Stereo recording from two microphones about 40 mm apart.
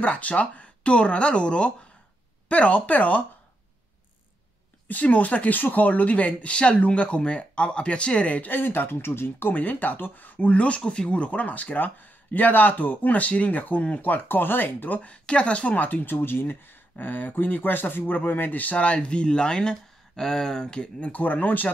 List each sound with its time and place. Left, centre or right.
0.0 s speech: left
4.8 s speech: left
8.4 s speech: left
9.5 s speech: left
10.2 s speech: left
15.0 s speech: left
21.1 s speech: left